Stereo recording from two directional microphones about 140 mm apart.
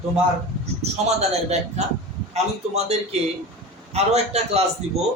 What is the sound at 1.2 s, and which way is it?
Speech, 50° right (ahead or behind).